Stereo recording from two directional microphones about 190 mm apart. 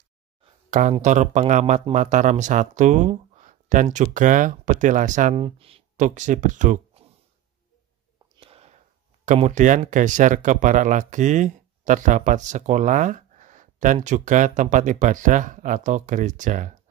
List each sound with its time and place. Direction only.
0.4 s speech: 40° right (ahead or behind)
8.4 s a sound: 30° right (ahead or behind)
9.2 s speech: 40° right (ahead or behind)